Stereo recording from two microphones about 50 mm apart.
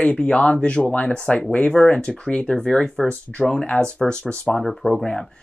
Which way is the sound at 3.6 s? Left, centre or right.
Left.